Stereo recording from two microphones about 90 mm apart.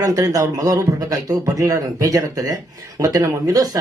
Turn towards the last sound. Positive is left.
turn(degrees=-40)  # may be behind; listen again after turning